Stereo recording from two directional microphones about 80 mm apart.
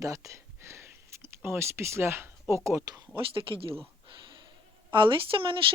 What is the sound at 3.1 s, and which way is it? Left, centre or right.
Speech, right.